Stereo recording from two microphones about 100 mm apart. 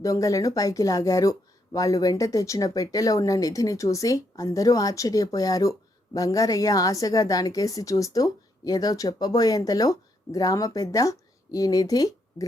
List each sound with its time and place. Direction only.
0.0 s a woman's voice: 35° left (ahead or behind)